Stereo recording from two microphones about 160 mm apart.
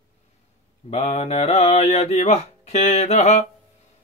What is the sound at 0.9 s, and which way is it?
Mantra, 40° left (ahead or behind).